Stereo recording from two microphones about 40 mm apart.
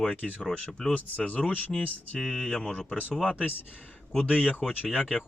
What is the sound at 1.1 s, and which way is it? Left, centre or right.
Speech, left.